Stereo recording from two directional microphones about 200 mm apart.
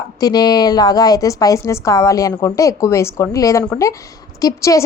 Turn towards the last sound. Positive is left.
turn(degrees=15)  # may be behind; listen again after turning